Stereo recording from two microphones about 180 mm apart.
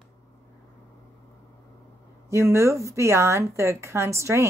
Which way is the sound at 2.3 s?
15° right (ahead or behind).